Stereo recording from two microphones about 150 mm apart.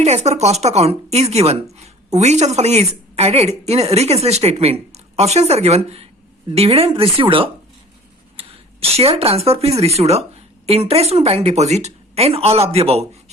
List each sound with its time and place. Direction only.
0.0 s a woman's voice: 50° right (ahead or behind)